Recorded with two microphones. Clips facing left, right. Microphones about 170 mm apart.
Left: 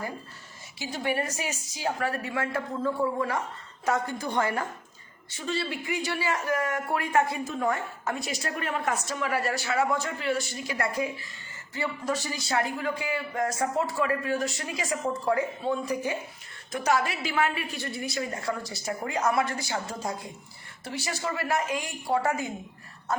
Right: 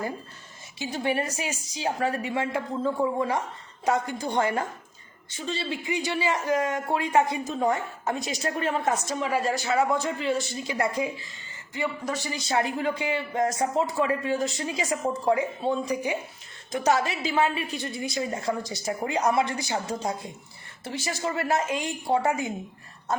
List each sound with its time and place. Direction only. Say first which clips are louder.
0.8 s speech: right 2 dB; 20° right (ahead or behind)
16.7 s speech: right 2 dB; 25° right (ahead or behind)